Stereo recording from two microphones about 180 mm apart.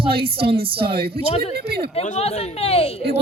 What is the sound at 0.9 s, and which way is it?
Speech, 60° right (ahead or behind).